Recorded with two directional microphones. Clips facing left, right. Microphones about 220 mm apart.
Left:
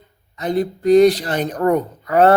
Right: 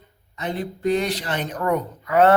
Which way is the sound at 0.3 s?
40° left (ahead or behind).